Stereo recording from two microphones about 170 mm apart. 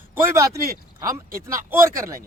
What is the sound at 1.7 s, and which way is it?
Speech, 15° right (ahead or behind).